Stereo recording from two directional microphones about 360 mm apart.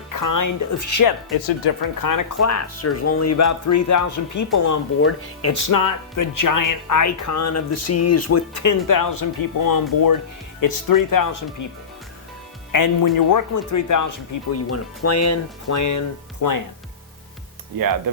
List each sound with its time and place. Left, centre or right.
0.1 s speech: left
1.6 s speech: left
4.9 s speech: left
5.6 s speech: left
12.7 s speech: left
14.5 s speech: left